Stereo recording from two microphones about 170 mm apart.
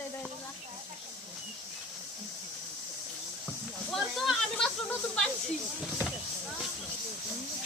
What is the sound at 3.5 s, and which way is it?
Speech, centre (ahead or behind).